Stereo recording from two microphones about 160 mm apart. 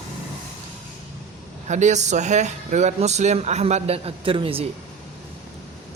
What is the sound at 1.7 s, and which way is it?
Speech, 45° right (ahead or behind).